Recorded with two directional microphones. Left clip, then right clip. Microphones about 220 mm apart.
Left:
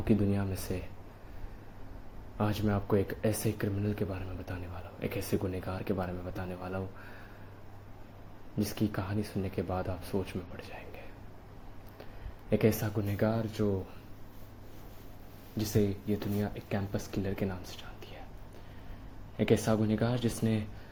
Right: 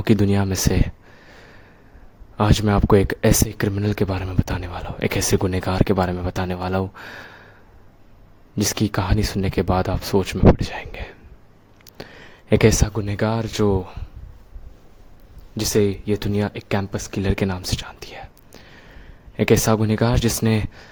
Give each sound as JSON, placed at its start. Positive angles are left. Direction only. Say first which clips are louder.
{"t": 0.0, "sound": "speech", "louder": "right 11 dB", "side_deg": -50}
{"t": 2.4, "sound": "speech", "louder": "right 13 dB", "side_deg": -45}
{"t": 8.5, "sound": "speech", "louder": "right 12 dB", "side_deg": -50}
{"t": 12.0, "sound": "a sound", "louder": "right 14 dB", "side_deg": -50}
{"t": 12.5, "sound": "speech", "louder": "right 12 dB", "side_deg": -50}
{"t": 15.5, "sound": "speech", "louder": "right 12 dB", "side_deg": -45}